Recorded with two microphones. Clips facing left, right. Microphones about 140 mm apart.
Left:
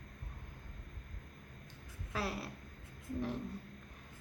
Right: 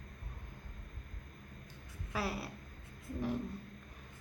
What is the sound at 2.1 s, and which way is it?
Speech, 5° right (ahead or behind).